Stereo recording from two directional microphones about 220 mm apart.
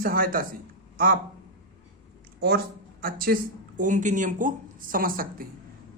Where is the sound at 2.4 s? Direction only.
45° right (ahead or behind).